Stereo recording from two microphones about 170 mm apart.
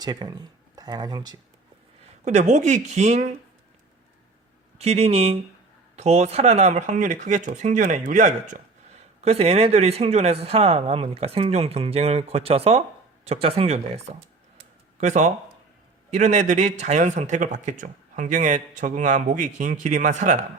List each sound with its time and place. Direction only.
0.0 s speech: 25° right (ahead or behind)
2.2 s speech: 45° right (ahead or behind)
4.8 s speech: 40° right (ahead or behind)
9.2 s speech: 35° right (ahead or behind)